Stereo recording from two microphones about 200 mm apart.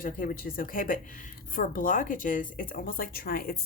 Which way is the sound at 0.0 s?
45° left (ahead or behind).